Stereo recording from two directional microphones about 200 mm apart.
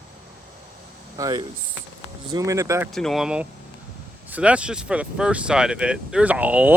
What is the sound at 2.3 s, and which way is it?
Speech, 15° right (ahead or behind).